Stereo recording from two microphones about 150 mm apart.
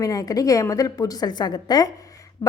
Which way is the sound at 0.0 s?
25° left (ahead or behind).